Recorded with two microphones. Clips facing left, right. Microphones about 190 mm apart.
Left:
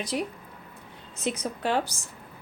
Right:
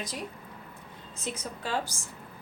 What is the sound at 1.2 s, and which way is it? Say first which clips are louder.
Speech: left 7 dB; 70° left (ahead or behind).